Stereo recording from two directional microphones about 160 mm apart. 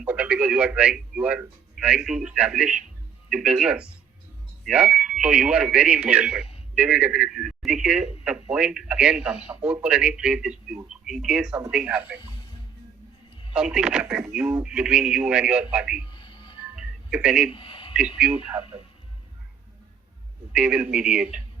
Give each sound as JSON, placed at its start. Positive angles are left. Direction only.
{"t": 0.0, "sound": "speech", "side_deg": -10}
{"t": 13.5, "sound": "speech", "side_deg": -5}
{"t": 16.0, "sound": "a sound", "side_deg": 30}
{"t": 16.7, "sound": "telephone", "side_deg": -5}
{"t": 17.5, "sound": "a man's voice", "side_deg": 35}
{"t": 18.2, "sound": "speech", "side_deg": -5}
{"t": 20.5, "sound": "speech", "side_deg": -5}